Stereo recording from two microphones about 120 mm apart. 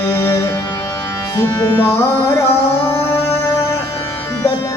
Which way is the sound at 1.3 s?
15° left (ahead or behind).